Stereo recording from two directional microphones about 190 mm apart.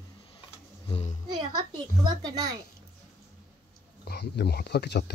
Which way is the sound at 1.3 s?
20° right (ahead or behind).